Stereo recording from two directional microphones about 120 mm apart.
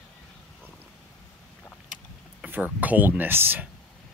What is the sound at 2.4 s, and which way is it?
Speech, 15° right (ahead or behind).